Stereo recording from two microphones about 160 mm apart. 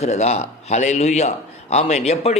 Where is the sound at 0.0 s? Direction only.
45° left (ahead or behind).